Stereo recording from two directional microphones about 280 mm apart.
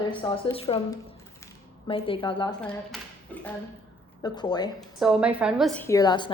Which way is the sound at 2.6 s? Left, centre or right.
Centre.